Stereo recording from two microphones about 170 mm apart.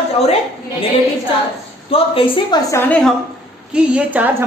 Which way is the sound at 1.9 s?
30° left (ahead or behind).